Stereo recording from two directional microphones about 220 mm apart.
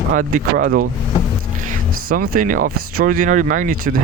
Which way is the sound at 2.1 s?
40° right (ahead or behind).